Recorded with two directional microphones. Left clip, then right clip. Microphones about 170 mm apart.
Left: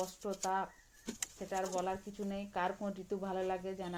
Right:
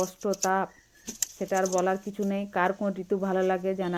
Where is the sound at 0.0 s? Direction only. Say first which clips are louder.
Right 11 dB; 35° right (ahead or behind).